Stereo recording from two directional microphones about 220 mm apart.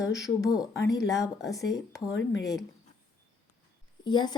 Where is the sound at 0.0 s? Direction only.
15° left (ahead or behind).